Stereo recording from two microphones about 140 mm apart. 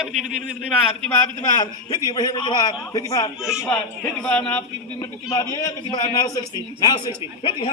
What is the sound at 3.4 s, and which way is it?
Speech, 5° right (ahead or behind).